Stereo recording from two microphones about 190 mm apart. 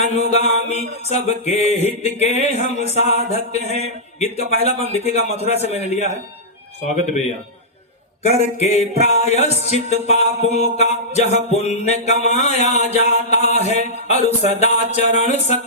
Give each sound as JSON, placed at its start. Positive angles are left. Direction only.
{"t": 0.7, "sound": "music", "side_deg": 35}
{"t": 8.3, "sound": "music", "side_deg": 35}